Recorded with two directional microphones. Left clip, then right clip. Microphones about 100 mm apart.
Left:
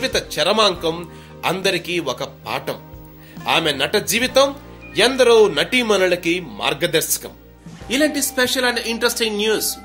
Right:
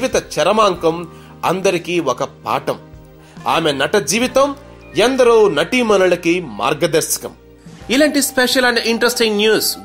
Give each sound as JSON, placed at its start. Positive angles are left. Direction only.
{"t": 0.0, "sound": "speech", "side_deg": -35}
{"t": 7.9, "sound": "speech", "side_deg": -90}